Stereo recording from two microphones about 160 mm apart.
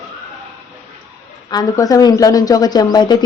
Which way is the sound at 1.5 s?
25° left (ahead or behind).